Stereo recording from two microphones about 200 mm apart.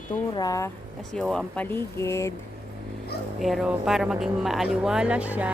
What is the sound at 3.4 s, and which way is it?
Speech, centre (ahead or behind).